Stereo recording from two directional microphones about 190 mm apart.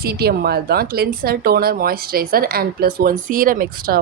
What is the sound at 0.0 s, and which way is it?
Speech, 55° right (ahead or behind).